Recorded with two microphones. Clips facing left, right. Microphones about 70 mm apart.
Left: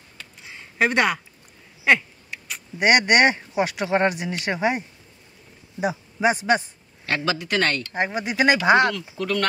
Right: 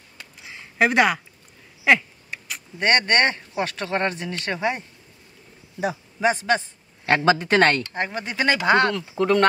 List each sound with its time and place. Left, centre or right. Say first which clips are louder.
0.2 s a sound: right 1 dB; centre
2.8 s a man's voice: left 3 dB; centre
7.2 s speech: right 6 dB; right
7.9 s speech: left 3 dB; centre
8.9 s speech: right 6 dB; right